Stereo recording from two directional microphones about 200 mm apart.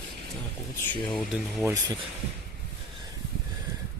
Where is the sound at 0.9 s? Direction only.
Centre (ahead or behind).